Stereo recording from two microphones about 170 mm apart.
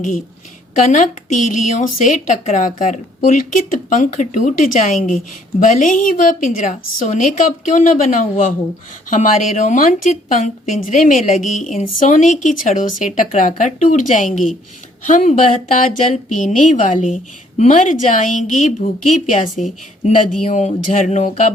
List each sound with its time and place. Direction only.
0.9 s a woman's voice: 50° left (ahead or behind)